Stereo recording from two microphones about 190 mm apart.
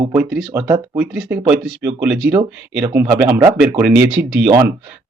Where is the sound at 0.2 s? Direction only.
5° right (ahead or behind).